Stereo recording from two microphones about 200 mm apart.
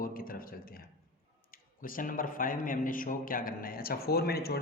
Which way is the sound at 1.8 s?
45° left (ahead or behind).